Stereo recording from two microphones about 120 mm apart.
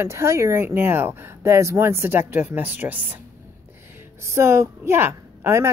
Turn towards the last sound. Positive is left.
turn(degrees=-20)  # may be behind; listen again after turning